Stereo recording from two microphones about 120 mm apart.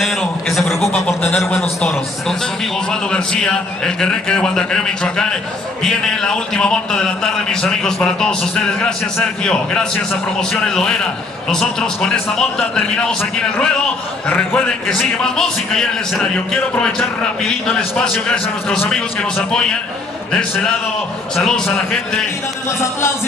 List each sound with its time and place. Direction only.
0.0 s a sound: centre (ahead or behind)
1.0 s a man's voice: 10° left (ahead or behind)
14.2 s a man's voice: 15° left (ahead or behind)
14.9 s a man's voice: 5° left (ahead or behind)
21.4 s a man's voice: 5° left (ahead or behind)
22.7 s music: 20° left (ahead or behind)